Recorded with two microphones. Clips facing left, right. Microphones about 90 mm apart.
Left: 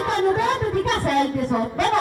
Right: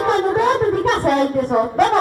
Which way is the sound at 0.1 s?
45° right (ahead or behind).